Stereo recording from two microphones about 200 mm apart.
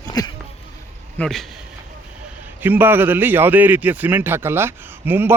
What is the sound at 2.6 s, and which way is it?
A man's voice, 10° right (ahead or behind).